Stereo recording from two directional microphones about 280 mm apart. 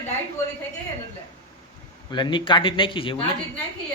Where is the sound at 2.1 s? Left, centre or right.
Centre.